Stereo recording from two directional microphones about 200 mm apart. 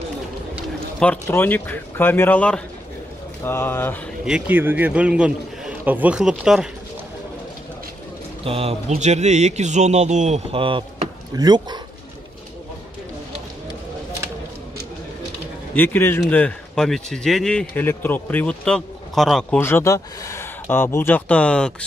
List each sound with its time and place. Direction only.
0.9 s speech: 5° left (ahead or behind)
4.2 s a man's voice: 5° right (ahead or behind)
8.5 s a man's voice: 30° right (ahead or behind)
15.7 s speech: 10° left (ahead or behind)